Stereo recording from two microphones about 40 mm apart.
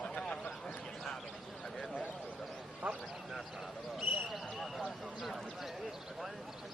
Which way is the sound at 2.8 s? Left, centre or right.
Right.